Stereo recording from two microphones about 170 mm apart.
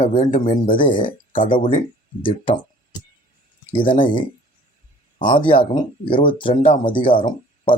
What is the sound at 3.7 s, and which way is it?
Speech, 30° left (ahead or behind).